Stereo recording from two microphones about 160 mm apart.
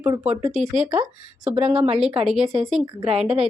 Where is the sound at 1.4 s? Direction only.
40° right (ahead or behind).